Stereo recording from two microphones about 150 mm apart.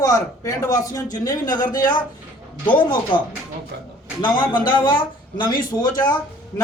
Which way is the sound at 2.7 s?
30° left (ahead or behind).